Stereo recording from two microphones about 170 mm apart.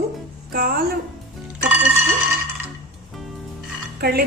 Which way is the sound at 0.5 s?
60° right (ahead or behind).